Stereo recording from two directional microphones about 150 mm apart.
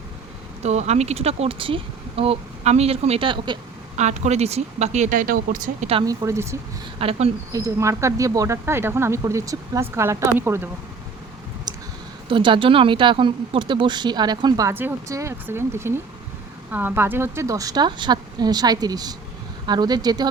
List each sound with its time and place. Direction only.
0.6 s speech: 45° right (ahead or behind); by 3.6 s 30° right (ahead or behind)
3.9 s speech: 50° right (ahead or behind)
6.1 s speech: 20° right (ahead or behind)
7.0 s speech: 40° right (ahead or behind)
7.5 s speech: 20° right (ahead or behind)
11.7 s a sound: 25° right (ahead or behind)
12.3 s speech: 35° right (ahead or behind)
14.7 s speech: 15° right (ahead or behind)